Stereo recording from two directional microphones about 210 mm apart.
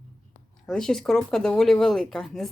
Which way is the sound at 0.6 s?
Centre (ahead or behind).